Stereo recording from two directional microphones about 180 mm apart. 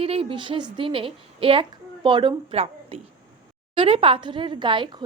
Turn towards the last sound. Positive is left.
turn(degrees=-25)  # may be behind; listen again after turning